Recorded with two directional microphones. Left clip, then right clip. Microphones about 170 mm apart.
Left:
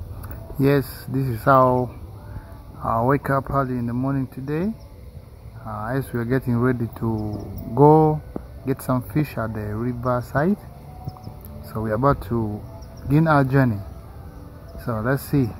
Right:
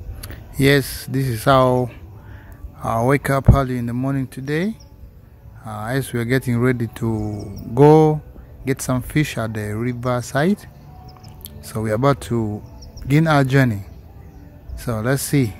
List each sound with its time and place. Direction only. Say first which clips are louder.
0.6 s speech: right 4 dB; 50° right (ahead or behind)
3.1 s speech: right 3 dB; 60° right (ahead or behind)
3.9 s speech: right 1 dB; 35° right (ahead or behind)
4.5 s speech: right 5 dB; 50° right (ahead or behind)
7.1 s speech: right 2 dB; 25° right (ahead or behind)
8.6 s speech: right 2 dB; 50° right (ahead or behind)
11.6 s speech: right 2 dB; 50° right (ahead or behind)
14.9 s speech: right 2 dB; 45° right (ahead or behind)